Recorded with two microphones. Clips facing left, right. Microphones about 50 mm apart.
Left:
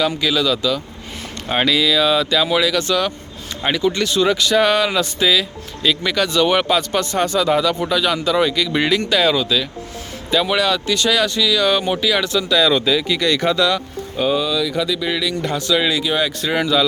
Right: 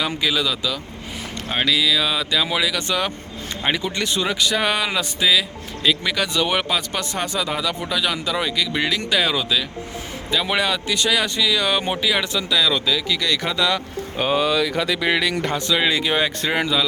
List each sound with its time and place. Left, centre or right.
0.2 s speech: centre
1.5 s speech: centre
9.0 s speech: centre
12.5 s speech: centre
13.6 s speech: centre
14.2 s speech: right
14.4 s speech: right
15.9 s speech: right
16.5 s speech: right